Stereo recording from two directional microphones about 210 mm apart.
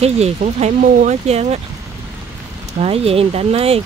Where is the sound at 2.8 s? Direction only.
30° right (ahead or behind).